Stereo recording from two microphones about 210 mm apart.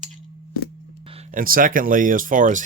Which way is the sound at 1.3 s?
40° right (ahead or behind).